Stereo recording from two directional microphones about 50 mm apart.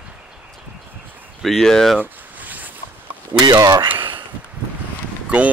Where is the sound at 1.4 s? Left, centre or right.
Centre.